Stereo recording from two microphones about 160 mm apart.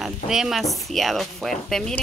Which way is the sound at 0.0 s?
5° right (ahead or behind).